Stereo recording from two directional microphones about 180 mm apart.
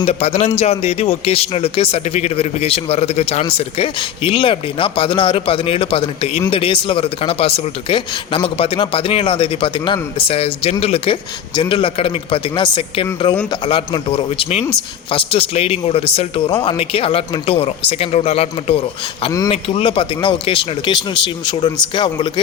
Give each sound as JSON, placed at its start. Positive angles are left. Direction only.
{"t": 0.0, "sound": "speech", "side_deg": 35}